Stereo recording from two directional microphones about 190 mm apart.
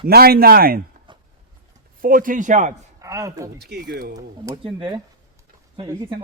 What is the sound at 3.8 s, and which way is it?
Speech, 45° right (ahead or behind).